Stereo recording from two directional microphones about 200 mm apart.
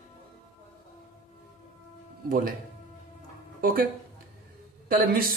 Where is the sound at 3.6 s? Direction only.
45° right (ahead or behind).